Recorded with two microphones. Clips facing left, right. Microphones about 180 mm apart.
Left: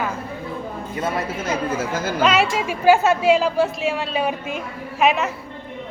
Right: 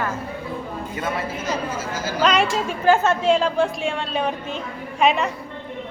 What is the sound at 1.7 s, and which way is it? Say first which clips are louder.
Speech: left 4 dB; 55° left (ahead or behind).